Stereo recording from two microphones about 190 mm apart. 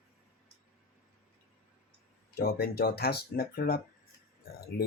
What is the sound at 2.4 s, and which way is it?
Speech, 55° left (ahead or behind).